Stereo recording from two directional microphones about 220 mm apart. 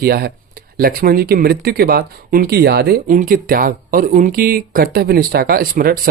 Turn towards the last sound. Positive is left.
turn(degrees=-40)  # may be behind; listen again after turning